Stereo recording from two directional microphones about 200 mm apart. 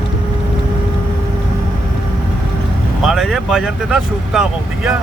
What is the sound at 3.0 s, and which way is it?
Speech, centre (ahead or behind).